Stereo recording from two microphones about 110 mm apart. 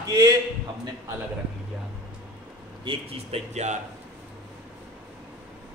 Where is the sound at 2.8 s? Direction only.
55° right (ahead or behind); by 3.7 s 80° right.